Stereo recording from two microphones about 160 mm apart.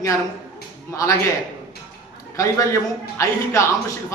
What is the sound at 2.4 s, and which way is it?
A man's voice, 20° left (ahead or behind).